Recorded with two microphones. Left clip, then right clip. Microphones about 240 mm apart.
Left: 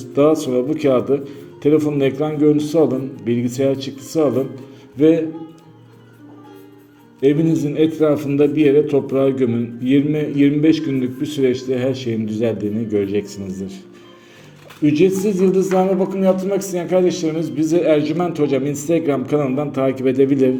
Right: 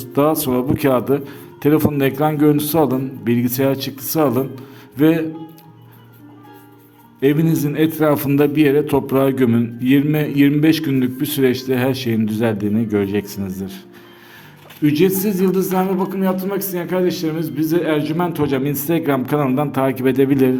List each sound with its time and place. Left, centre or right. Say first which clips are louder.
0.0 s a man's voice: left 2 dB; right
7.2 s a man's voice: left 1 dB; right
14.8 s a man's voice: left 1 dB; right